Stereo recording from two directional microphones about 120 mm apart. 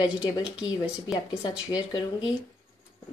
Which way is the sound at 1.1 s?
35° left (ahead or behind).